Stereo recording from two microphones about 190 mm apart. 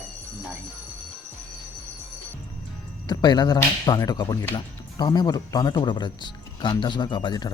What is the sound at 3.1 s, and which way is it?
Speech, 20° left (ahead or behind).